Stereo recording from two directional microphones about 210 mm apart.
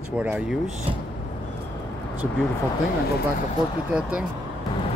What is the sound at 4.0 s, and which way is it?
Speech, 5° right (ahead or behind).